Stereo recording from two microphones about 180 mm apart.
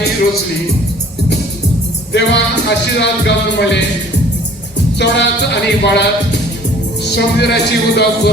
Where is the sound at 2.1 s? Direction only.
70° left (ahead or behind).